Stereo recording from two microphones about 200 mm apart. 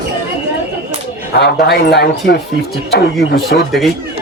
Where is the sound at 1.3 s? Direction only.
55° left (ahead or behind).